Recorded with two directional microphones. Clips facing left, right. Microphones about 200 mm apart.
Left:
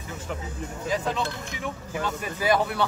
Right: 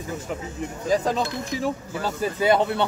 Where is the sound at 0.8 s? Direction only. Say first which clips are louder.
Right 5 dB; 40° right (ahead or behind).